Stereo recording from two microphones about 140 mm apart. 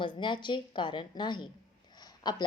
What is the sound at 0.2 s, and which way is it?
A woman's voice, 35° left (ahead or behind).